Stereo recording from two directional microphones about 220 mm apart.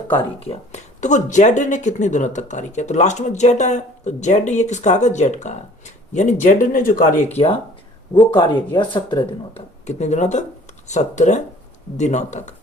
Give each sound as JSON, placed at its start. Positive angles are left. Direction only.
{"t": 0.2, "sound": "speech", "side_deg": 25}